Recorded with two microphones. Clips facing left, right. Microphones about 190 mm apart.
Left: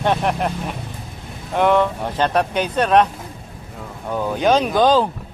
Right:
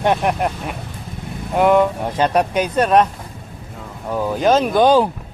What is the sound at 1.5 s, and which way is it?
Speech, 5° right (ahead or behind).